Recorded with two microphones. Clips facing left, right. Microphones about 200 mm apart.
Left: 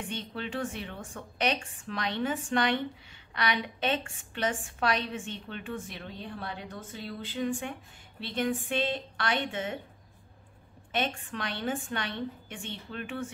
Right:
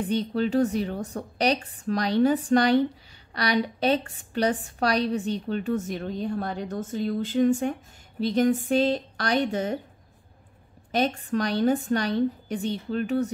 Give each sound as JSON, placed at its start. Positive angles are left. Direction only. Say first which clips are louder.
{"t": 0.0, "sound": "a woman's voice", "louder": "right 12 dB", "side_deg": -40}
{"t": 10.9, "sound": "a woman's voice", "louder": "right 7 dB", "side_deg": -40}